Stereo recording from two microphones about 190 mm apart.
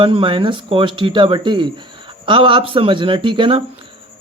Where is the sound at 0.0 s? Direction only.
25° right (ahead or behind).